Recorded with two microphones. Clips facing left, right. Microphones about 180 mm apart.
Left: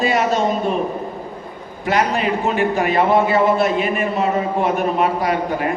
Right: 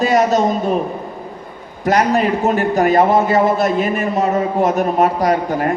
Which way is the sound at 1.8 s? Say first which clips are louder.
Right 4 dB; 40° right (ahead or behind).